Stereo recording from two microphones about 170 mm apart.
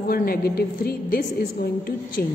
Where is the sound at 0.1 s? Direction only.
60° left (ahead or behind).